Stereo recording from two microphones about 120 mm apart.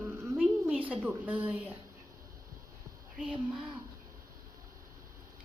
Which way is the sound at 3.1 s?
10° right (ahead or behind).